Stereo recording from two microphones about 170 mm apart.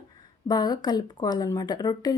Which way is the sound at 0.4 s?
25° left (ahead or behind).